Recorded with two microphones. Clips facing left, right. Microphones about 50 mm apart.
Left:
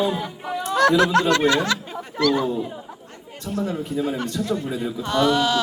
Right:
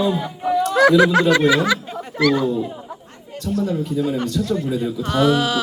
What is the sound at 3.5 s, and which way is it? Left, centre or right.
A man's voice, left.